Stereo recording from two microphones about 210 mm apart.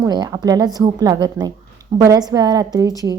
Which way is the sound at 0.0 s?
20° right (ahead or behind).